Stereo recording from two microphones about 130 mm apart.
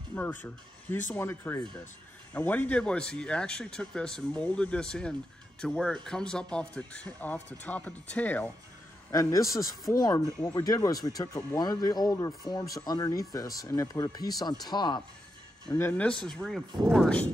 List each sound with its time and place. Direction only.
0.1 s speech: 15° left (ahead or behind)
9.1 s speech: 25° left (ahead or behind)
15.7 s speech: 15° left (ahead or behind)